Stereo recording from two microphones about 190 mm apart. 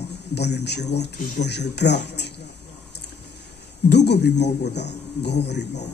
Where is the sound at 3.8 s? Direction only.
65° left (ahead or behind).